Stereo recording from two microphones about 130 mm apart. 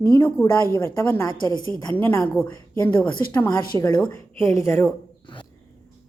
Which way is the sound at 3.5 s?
30° left (ahead or behind).